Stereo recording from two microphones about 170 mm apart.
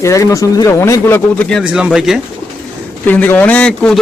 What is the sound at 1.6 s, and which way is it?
Speech, 5° right (ahead or behind).